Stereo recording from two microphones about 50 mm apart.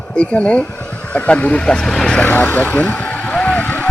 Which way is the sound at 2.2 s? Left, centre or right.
Left.